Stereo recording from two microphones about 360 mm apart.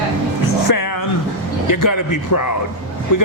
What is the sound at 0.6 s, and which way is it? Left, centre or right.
A man's voice, left.